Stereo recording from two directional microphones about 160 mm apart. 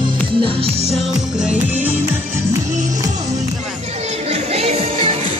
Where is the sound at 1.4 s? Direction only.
10° right (ahead or behind).